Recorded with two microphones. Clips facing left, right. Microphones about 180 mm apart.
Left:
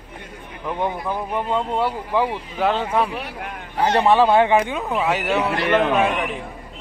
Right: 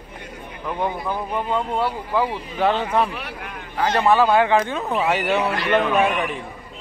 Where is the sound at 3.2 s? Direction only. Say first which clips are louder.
Left 2 dB; 30° left (ahead or behind).